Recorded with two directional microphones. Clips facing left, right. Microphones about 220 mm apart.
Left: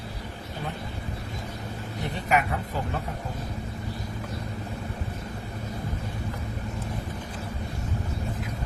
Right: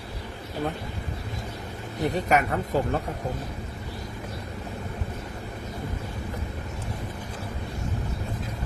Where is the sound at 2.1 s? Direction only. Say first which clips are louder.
Right 1 dB; 40° right (ahead or behind).